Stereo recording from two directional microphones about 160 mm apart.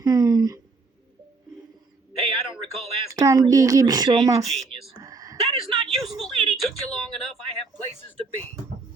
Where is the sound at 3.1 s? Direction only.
20° right (ahead or behind).